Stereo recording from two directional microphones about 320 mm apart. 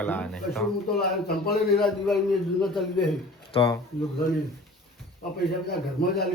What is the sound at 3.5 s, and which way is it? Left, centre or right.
Speech, centre.